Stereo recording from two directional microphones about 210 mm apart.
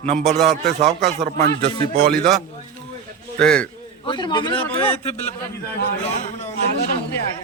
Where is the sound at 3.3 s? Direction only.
5° left (ahead or behind).